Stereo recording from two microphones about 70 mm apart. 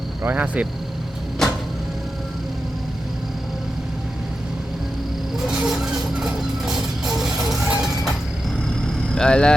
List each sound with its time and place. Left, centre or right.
0.3 s speech: right
1.4 s vehicle: centre
5.5 s music: centre
9.1 s speech: centre